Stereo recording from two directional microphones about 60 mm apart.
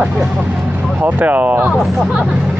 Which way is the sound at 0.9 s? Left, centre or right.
Right.